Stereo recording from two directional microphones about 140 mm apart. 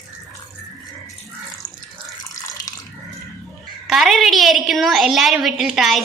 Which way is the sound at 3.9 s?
Centre (ahead or behind).